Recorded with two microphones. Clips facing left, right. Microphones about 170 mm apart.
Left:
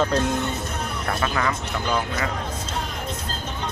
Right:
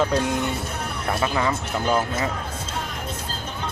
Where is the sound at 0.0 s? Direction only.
10° right (ahead or behind).